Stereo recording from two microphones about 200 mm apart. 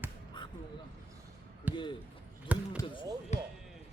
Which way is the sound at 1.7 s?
10° right (ahead or behind).